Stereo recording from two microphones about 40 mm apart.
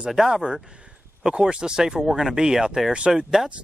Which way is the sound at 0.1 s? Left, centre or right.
Centre.